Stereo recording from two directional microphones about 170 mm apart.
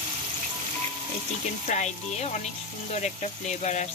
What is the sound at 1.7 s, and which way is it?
Speech, 45° left (ahead or behind).